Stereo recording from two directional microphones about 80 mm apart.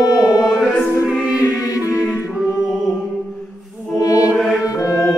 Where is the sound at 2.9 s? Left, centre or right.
Centre.